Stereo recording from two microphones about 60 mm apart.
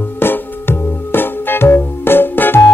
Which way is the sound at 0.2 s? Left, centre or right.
Left.